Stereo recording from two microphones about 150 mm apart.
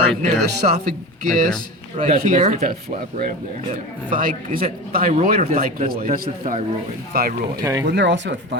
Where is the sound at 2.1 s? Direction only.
60° right (ahead or behind).